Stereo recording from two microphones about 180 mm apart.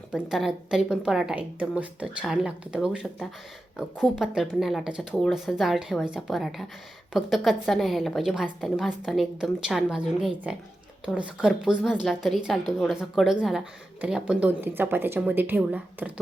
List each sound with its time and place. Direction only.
0.1 s a woman's voice: centre (ahead or behind)